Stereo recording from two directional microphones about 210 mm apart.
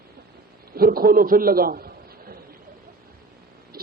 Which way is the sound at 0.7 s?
45° right (ahead or behind).